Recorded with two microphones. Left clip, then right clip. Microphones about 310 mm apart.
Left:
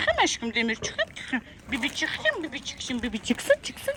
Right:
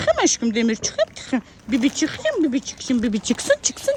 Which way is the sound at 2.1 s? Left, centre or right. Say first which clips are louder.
Right 6 dB; right.